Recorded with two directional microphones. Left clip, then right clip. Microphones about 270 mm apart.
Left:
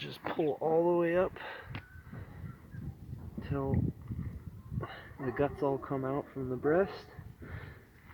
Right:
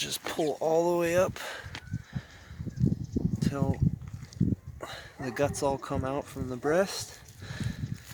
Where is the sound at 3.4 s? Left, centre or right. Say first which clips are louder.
Right 1 dB; right.